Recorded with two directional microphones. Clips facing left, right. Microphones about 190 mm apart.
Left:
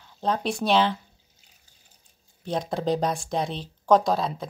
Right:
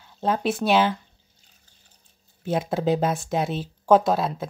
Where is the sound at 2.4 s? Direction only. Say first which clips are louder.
Right 3 dB; 5° right (ahead or behind).